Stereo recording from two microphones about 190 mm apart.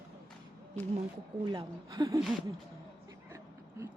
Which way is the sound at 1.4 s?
20° right (ahead or behind).